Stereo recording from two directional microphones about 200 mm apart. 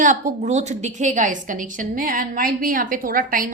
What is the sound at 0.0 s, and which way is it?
A woman's voice, 40° right (ahead or behind).